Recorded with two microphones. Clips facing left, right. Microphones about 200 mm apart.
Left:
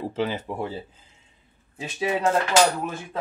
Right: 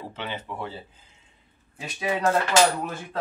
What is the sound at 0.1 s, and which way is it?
Speech, 40° left (ahead or behind).